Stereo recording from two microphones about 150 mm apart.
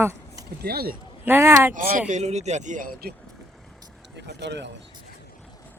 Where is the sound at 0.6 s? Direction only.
90° right.